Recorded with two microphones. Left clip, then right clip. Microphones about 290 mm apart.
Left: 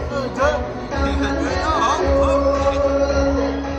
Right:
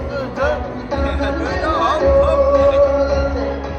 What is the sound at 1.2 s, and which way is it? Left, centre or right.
Music, centre.